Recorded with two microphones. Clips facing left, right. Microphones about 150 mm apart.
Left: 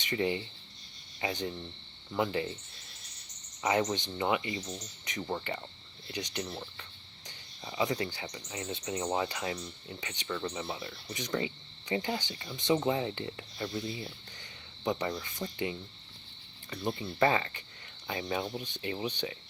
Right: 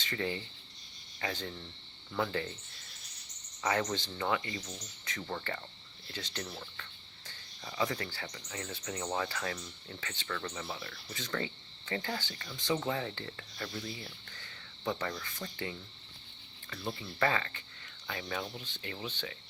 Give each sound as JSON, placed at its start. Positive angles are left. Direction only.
{"t": 0.0, "sound": "speech", "side_deg": 20}
{"t": 1.2, "sound": "cricket", "side_deg": 20}
{"t": 3.6, "sound": "speech", "side_deg": 20}
{"t": 6.1, "sound": "cricket", "side_deg": 15}
{"t": 7.3, "sound": "speech", "side_deg": 20}